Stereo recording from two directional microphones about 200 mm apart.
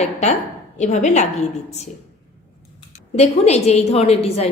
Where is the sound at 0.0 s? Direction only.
35° left (ahead or behind).